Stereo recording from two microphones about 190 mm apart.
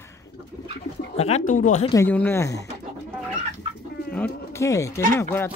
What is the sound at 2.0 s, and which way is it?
Speech, 10° left (ahead or behind).